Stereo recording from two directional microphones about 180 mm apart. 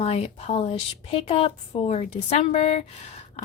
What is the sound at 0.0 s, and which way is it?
Speech, 35° left (ahead or behind).